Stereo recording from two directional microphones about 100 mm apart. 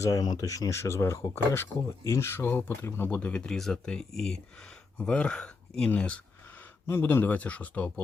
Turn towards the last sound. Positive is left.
turn(degrees=15)  # may be behind; listen again after turning